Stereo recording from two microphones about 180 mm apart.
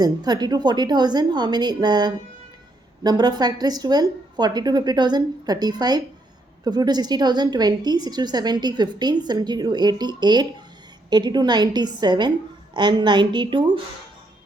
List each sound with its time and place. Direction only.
0.0 s a woman's voice: 20° right (ahead or behind)